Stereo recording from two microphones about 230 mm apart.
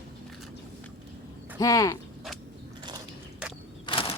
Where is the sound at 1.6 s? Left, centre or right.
Centre.